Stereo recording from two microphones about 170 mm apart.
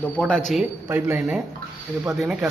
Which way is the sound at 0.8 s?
15° right (ahead or behind).